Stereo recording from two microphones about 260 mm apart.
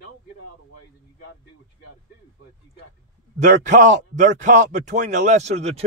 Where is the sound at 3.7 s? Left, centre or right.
Right.